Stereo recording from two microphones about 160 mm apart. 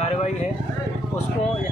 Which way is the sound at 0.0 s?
40° left (ahead or behind).